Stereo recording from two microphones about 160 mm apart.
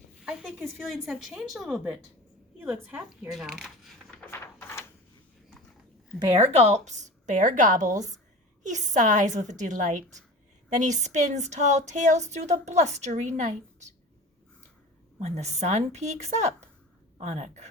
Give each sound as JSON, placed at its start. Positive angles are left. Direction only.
{"t": 0.8, "sound": "a woman's voice", "side_deg": 0}
{"t": 3.3, "sound": "a sound", "side_deg": 0}
{"t": 6.4, "sound": "speech", "side_deg": -40}
{"t": 15.2, "sound": "speech", "side_deg": -45}